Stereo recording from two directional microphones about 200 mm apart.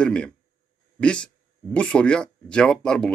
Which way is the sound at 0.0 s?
5° left (ahead or behind).